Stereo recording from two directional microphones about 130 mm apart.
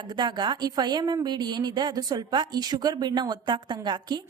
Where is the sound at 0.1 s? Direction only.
35° right (ahead or behind).